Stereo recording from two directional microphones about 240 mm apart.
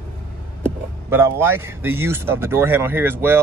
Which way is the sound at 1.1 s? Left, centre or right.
Centre.